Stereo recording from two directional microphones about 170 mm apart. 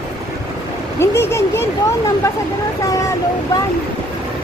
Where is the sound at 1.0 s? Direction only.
15° left (ahead or behind).